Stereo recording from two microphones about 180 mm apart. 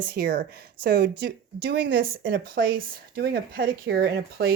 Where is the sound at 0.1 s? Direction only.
65° right (ahead or behind); by 2.0 s 85° right.